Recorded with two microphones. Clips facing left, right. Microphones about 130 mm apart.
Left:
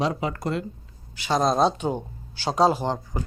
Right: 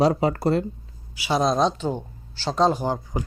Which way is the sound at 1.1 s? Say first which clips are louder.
Right 1 dB; 10° right (ahead or behind).